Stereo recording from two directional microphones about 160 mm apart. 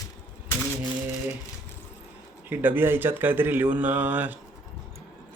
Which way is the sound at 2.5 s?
15° right (ahead or behind).